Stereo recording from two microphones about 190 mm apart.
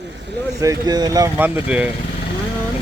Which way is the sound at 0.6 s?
20° right (ahead or behind).